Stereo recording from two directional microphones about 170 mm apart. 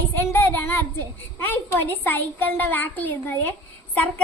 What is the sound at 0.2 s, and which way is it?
A child's voice, 10° left (ahead or behind).